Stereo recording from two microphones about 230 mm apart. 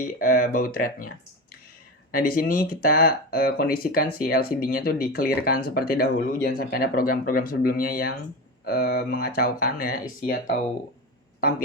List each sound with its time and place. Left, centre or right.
0.2 s speech: left
2.1 s speech: left